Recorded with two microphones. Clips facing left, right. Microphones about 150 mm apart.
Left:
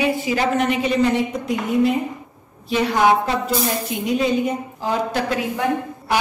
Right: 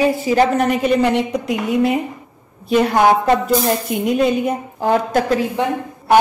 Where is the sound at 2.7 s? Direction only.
50° right (ahead or behind).